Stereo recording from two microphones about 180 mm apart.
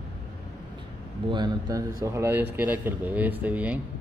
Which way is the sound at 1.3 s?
20° right (ahead or behind).